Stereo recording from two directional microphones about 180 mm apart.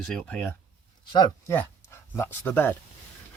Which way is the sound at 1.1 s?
25° left (ahead or behind).